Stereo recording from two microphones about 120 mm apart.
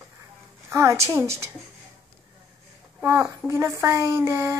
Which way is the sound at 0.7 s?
20° right (ahead or behind).